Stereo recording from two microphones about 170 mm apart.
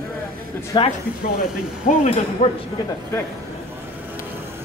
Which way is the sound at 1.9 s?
50° left (ahead or behind).